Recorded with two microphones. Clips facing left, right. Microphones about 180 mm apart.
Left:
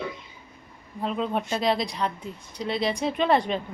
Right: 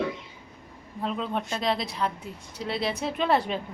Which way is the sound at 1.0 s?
5° left (ahead or behind).